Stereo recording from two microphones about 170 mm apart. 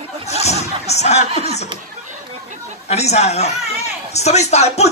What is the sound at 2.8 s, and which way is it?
A man's voice, 40° left (ahead or behind).